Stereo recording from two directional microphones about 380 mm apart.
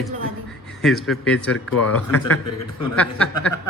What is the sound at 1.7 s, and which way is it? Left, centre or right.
Speech, left.